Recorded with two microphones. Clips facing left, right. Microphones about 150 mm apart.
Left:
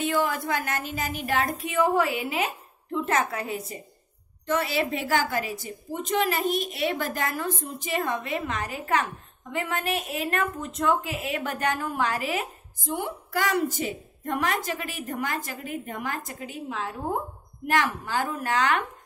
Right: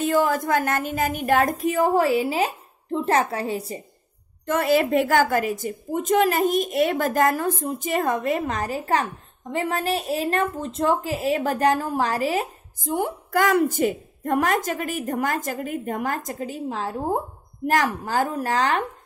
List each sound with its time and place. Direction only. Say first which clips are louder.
0.0 s a woman's voice: right 5 dB; 40° right (ahead or behind)
4.5 s a woman's voice: right 6 dB; 50° right (ahead or behind); by 18.9 s 35° right (ahead or behind)